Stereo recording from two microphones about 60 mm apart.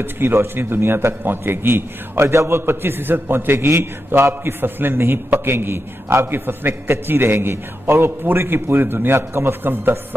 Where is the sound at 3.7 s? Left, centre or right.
Right.